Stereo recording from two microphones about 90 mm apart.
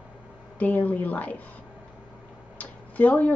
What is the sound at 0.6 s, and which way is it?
Speech, 15° left (ahead or behind).